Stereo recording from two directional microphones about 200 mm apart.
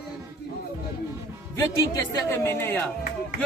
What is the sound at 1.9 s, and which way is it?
Speech, 10° left (ahead or behind).